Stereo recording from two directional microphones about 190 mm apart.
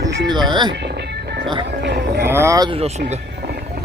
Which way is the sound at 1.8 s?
60° right (ahead or behind).